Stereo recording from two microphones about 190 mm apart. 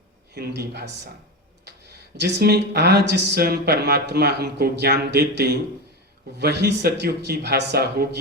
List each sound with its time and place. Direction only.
0.3 s speech: 60° right (ahead or behind)
2.1 s speech: 60° right (ahead or behind)